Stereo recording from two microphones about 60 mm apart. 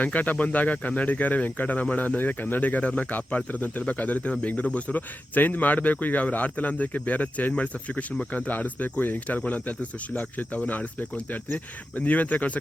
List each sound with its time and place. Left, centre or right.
0.0 s speech: left